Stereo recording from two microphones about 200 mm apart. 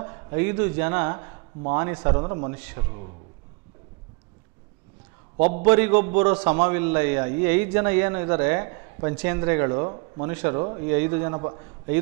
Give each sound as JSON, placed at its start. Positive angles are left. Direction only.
{"t": 0.0, "sound": "speech", "side_deg": -20}
{"t": 2.5, "sound": "a man's voice", "side_deg": -15}
{"t": 5.6, "sound": "a man's voice", "side_deg": -15}